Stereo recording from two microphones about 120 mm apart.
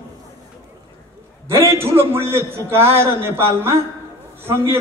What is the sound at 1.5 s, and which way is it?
A man's voice, 20° right (ahead or behind).